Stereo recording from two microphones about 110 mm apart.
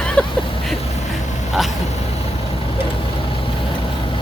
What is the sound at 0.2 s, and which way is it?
Vehicle, 10° left (ahead or behind).